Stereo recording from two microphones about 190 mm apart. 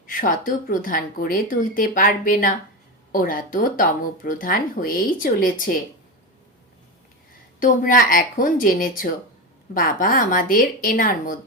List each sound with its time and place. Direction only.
0.1 s speech: 45° left (ahead or behind)
7.6 s speech: 45° left (ahead or behind)